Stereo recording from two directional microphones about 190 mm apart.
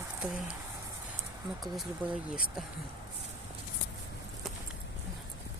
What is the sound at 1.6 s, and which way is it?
Speech, centre (ahead or behind).